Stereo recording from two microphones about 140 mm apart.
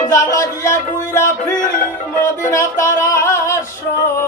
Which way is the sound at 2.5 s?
20° left (ahead or behind).